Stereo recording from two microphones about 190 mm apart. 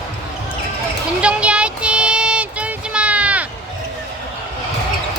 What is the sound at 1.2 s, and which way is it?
Child singing, 5° right (ahead or behind).